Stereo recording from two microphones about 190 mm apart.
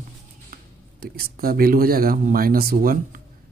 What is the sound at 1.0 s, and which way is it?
Speech, 50° right (ahead or behind).